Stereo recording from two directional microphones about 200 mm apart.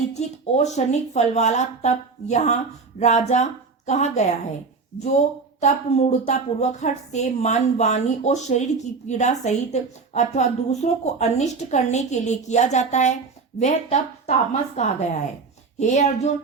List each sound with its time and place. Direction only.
0.1 s a woman's voice: 35° left (ahead or behind)
5.5 s a woman's voice: 35° left (ahead or behind)